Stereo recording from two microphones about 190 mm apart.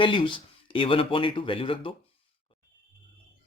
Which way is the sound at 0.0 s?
25° left (ahead or behind).